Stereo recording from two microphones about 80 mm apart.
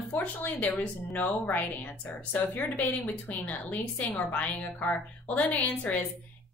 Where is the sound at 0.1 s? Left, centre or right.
Left.